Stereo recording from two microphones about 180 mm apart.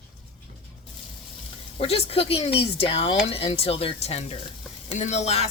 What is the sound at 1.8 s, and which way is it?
A woman's voice, 35° left (ahead or behind).